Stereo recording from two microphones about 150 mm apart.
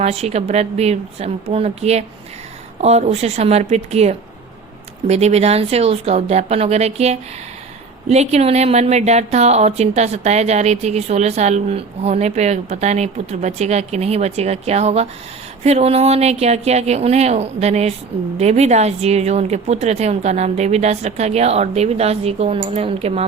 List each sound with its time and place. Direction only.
0.0 s speech: 45° right (ahead or behind)